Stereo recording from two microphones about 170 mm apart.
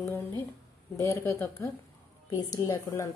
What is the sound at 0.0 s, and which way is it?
A woman's voice, 15° left (ahead or behind).